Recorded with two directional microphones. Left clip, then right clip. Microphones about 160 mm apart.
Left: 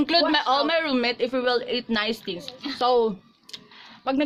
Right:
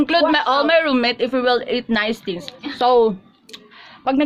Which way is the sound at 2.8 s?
20° right (ahead or behind).